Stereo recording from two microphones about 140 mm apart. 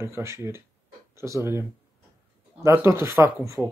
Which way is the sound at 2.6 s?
20° right (ahead or behind).